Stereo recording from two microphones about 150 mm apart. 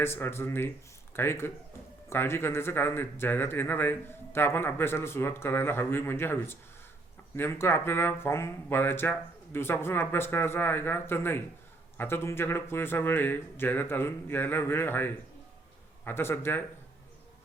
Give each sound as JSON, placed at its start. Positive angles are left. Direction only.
{"t": 0.0, "sound": "speech", "side_deg": 15}